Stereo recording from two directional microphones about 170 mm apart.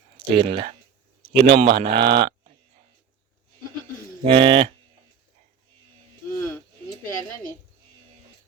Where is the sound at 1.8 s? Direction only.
30° right (ahead or behind).